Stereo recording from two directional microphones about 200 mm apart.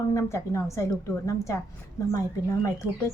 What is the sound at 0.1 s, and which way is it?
A woman's voice, 15° left (ahead or behind).